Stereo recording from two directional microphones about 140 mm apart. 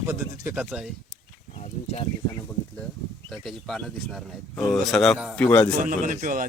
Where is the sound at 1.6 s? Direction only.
50° left (ahead or behind).